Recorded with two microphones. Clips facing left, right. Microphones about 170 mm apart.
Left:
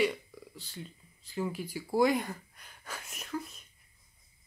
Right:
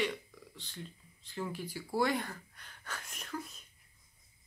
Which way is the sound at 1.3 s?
10° left (ahead or behind).